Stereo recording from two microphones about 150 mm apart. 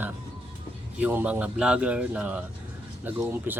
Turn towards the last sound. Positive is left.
turn(degrees=-15)  # may be behind; listen again after turning